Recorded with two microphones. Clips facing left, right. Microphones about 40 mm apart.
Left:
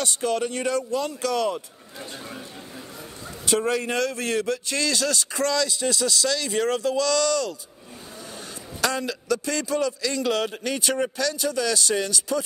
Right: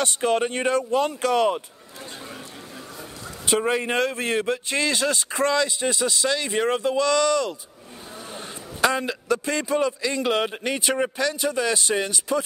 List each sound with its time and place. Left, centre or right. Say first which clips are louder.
0.0 s speech: right 3 dB; right
3.4 s a man's voice: right 1 dB; right